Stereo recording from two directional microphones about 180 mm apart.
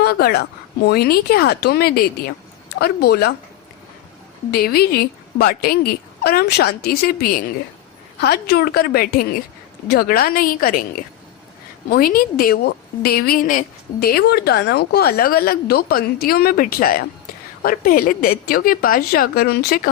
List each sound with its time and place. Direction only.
0.0 s a woman's voice: 60° left (ahead or behind)
4.5 s a woman's voice: 60° left (ahead or behind)
11.9 s a woman's voice: 55° left (ahead or behind)